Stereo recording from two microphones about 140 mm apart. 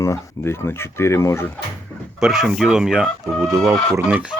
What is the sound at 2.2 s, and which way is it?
Speech, 5° right (ahead or behind).